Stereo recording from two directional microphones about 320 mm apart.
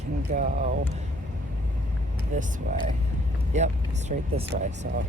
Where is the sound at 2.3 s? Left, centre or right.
Right.